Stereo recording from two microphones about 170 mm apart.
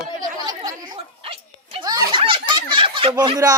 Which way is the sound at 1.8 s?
20° right (ahead or behind).